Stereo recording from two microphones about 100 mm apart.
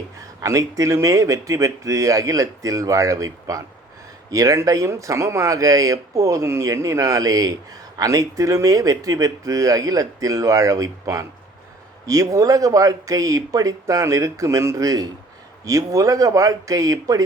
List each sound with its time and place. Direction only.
0.4 s speech: 30° right (ahead or behind)